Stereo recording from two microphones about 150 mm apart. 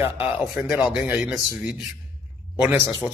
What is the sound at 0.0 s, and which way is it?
A man's voice, 15° right (ahead or behind).